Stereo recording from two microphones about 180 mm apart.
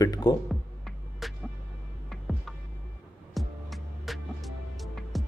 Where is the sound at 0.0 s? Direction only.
20° left (ahead or behind).